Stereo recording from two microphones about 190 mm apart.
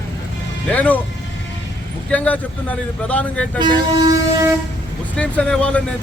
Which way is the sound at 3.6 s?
20° right (ahead or behind).